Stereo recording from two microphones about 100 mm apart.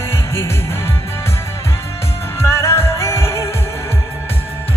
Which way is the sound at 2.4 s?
30° left (ahead or behind).